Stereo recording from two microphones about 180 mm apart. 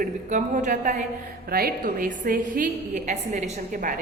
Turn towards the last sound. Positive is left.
turn(degrees=-40)  # may be behind; listen again after turning